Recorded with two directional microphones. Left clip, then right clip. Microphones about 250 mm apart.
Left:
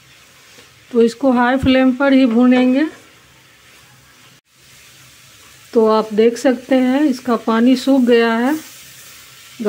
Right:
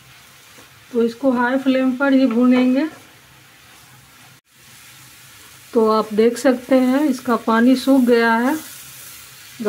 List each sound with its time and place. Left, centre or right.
0.9 s speech: left
5.7 s speech: centre
9.6 s a sound: centre